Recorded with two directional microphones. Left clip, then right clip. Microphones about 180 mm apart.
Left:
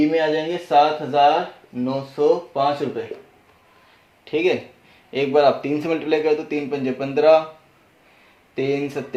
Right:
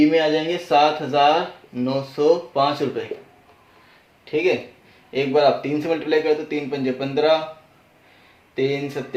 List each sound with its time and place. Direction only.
0.0 s speech: 5° left (ahead or behind)
4.3 s a man's voice: 45° left (ahead or behind)